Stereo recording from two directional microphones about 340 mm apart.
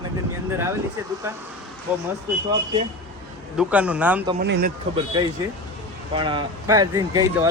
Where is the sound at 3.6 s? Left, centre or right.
Centre.